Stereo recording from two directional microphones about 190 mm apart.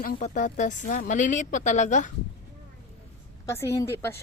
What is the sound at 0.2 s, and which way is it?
A woman's voice, 40° left (ahead or behind).